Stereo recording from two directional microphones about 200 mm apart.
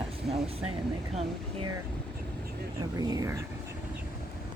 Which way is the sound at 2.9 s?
15° right (ahead or behind).